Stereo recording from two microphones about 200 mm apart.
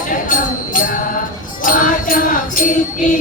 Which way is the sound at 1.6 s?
45° left (ahead or behind).